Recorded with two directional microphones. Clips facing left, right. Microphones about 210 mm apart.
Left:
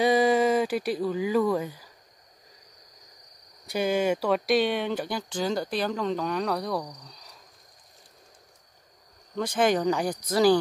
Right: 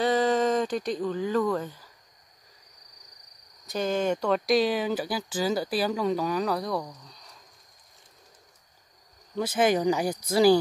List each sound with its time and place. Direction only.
0.0 s speech: 10° left (ahead or behind)
3.6 s speech: 10° left (ahead or behind)
9.4 s speech: 5° right (ahead or behind)